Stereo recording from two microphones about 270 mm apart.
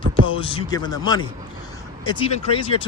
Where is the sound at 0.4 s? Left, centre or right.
Centre.